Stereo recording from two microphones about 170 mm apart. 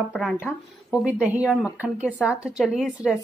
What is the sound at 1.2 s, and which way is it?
Speech, 10° right (ahead or behind).